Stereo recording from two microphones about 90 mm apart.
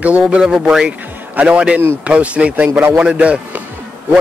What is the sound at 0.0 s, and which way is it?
Speech, 10° right (ahead or behind).